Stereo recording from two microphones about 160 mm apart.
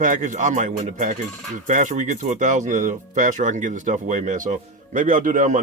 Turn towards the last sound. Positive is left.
turn(degrees=-55)  # may be behind; listen again after turning